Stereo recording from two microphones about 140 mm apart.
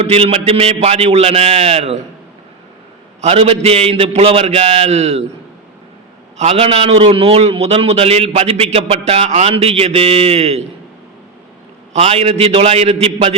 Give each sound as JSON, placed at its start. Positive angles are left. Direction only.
{"t": 0.0, "sound": "a man's voice", "side_deg": -45}
{"t": 3.2, "sound": "a man's voice", "side_deg": -50}
{"t": 6.3, "sound": "a man's voice", "side_deg": -50}
{"t": 11.9, "sound": "a man's voice", "side_deg": -45}